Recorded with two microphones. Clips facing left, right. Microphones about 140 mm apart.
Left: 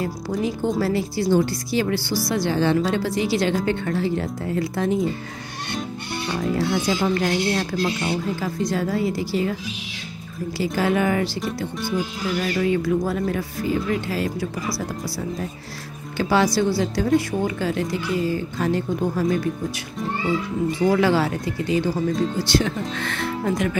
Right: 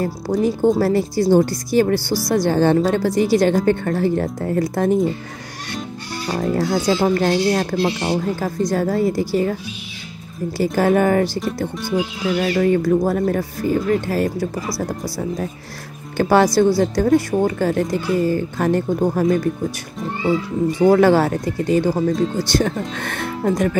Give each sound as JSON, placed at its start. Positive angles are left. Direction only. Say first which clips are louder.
{"t": 0.0, "sound": "speech", "louder": "right 5 dB", "side_deg": -45}
{"t": 6.5, "sound": "speech", "louder": "right 4 dB", "side_deg": -40}
{"t": 8.4, "sound": "speech", "louder": "right 4 dB", "side_deg": -45}
{"t": 10.6, "sound": "speech", "louder": "right 5 dB", "side_deg": -45}
{"t": 20.8, "sound": "speech", "louder": "right 6 dB", "side_deg": -50}